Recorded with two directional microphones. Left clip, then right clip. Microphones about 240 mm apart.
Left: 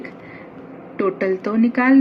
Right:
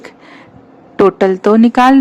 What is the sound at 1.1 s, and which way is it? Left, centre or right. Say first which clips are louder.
Speech: right 10 dB; right.